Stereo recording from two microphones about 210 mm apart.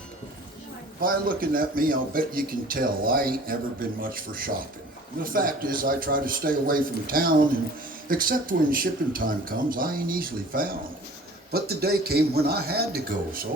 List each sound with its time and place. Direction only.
1.0 s speech: 45° right (ahead or behind)